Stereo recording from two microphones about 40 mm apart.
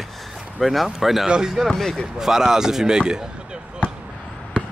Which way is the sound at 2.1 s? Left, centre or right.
Centre.